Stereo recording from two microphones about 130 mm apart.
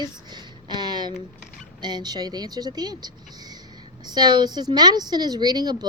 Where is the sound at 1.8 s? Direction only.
35° right (ahead or behind).